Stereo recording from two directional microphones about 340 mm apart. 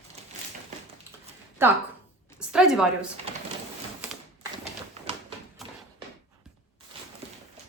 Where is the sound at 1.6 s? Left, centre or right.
Centre.